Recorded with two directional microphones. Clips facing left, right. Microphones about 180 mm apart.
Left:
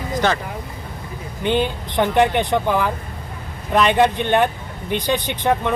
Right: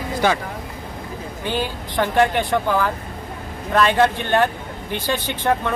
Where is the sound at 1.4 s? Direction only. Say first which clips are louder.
Left 5 dB; 20° left (ahead or behind).